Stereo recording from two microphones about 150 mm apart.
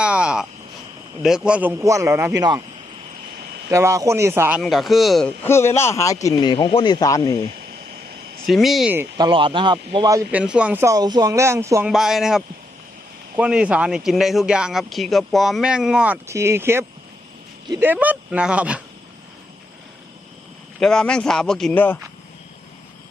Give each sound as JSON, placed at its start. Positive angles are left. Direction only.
{"t": 0.0, "sound": "a sound", "side_deg": -5}
{"t": 1.2, "sound": "a man's voice", "side_deg": -5}
{"t": 3.7, "sound": "a man's voice", "side_deg": -20}
{"t": 4.6, "sound": "speech", "side_deg": 0}
{"t": 5.4, "sound": "a man's voice", "side_deg": 15}
{"t": 8.4, "sound": "speech", "side_deg": 0}
{"t": 9.1, "sound": "speech", "side_deg": -30}
{"t": 10.3, "sound": "a man's voice", "side_deg": -5}
{"t": 10.8, "sound": "speech", "side_deg": -25}
{"t": 11.9, "sound": "speech", "side_deg": 0}
{"t": 16.2, "sound": "a man's voice", "side_deg": -20}
{"t": 20.7, "sound": "speech", "side_deg": 5}